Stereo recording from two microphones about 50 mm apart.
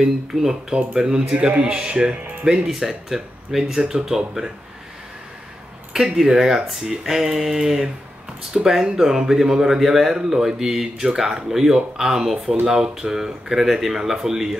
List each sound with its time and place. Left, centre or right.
0.0 s speech: centre
1.6 s music: centre
2.4 s speech: centre
6.1 s speech: centre